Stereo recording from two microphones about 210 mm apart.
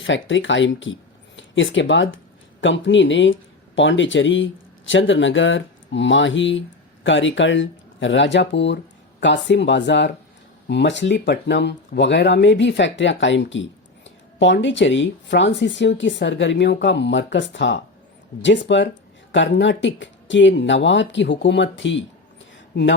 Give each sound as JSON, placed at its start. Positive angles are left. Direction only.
{"t": 0.0, "sound": "speech", "side_deg": 60}